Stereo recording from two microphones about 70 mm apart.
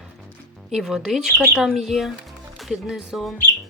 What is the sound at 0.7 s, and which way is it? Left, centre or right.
Speech, centre.